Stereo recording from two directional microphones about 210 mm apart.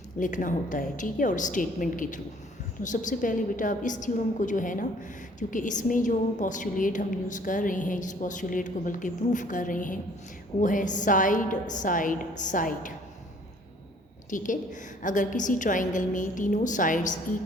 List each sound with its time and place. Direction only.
0.2 s a woman's voice: 40° left (ahead or behind)
14.3 s a woman's voice: 40° left (ahead or behind)